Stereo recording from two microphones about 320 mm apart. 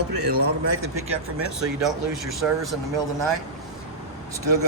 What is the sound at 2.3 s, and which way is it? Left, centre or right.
Speech, centre.